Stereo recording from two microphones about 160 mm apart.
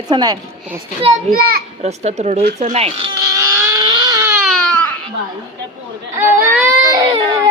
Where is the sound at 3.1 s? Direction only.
20° right (ahead or behind).